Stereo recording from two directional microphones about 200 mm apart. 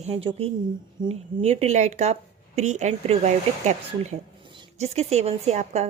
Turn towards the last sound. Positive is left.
turn(degrees=-35)  # may be behind; listen again after turning